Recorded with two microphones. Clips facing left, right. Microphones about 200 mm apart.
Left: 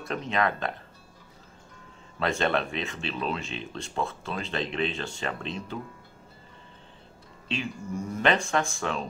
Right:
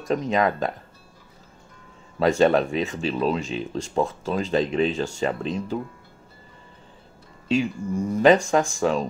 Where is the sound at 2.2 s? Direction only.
40° right (ahead or behind).